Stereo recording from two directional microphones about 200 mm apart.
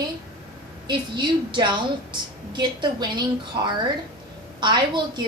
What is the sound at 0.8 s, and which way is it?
A woman's voice, 20° right (ahead or behind).